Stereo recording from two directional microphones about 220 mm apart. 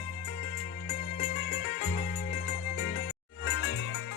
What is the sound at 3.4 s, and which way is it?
Music, 60° left (ahead or behind).